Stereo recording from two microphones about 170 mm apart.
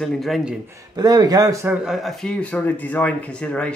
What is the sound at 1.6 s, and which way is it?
Speech, 5° right (ahead or behind).